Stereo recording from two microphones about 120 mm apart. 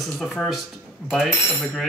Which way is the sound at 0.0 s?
Centre (ahead or behind).